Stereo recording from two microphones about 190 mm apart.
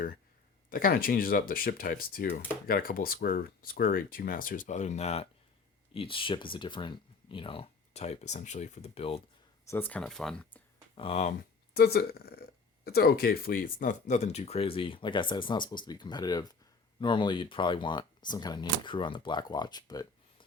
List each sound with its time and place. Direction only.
0.7 s speech: 50° left (ahead or behind); by 9.2 s 30° left (ahead or behind)
9.6 s speech: 10° left (ahead or behind)
10.9 s speech: 30° left (ahead or behind)
11.7 s speech: 55° left (ahead or behind); by 20.1 s 20° left (ahead or behind)